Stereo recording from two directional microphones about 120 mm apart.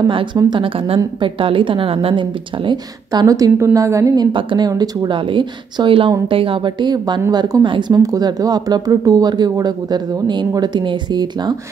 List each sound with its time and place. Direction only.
0.0 s a woman's voice: 40° right (ahead or behind); by 4.3 s 25° right (ahead or behind)
4.3 s a woman's voice: 45° right (ahead or behind)